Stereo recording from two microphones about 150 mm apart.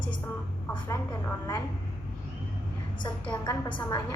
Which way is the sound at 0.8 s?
20° left (ahead or behind).